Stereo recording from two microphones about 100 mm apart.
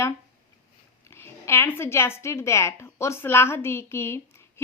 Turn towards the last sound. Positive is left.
turn(degrees=25)  # may be behind; listen again after turning